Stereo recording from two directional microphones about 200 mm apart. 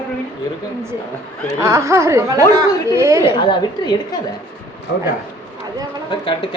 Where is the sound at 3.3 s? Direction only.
25° left (ahead or behind).